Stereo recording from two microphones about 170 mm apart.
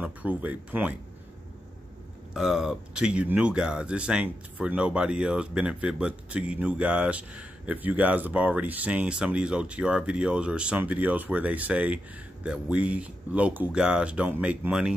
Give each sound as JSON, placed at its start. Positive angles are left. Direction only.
{"t": 0.0, "sound": "speech", "side_deg": -10}
{"t": 2.3, "sound": "speech", "side_deg": 0}